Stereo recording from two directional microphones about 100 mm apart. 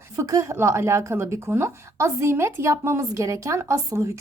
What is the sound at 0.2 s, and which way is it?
A woman's voice, 35° right (ahead or behind).